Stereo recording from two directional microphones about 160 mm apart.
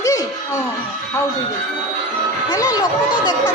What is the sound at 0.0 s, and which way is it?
Music, 20° left (ahead or behind).